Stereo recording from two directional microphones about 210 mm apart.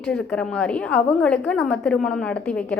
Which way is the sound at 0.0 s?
5° left (ahead or behind).